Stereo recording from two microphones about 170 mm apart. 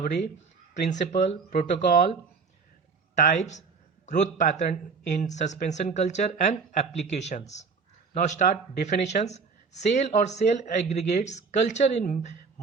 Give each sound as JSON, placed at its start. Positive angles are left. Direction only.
{"t": 0.9, "sound": "speech", "side_deg": 45}
{"t": 3.2, "sound": "speech", "side_deg": 45}